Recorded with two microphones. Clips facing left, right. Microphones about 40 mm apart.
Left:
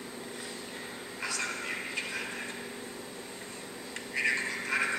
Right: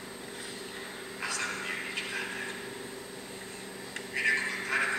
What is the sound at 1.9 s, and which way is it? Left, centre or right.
Vehicle, right.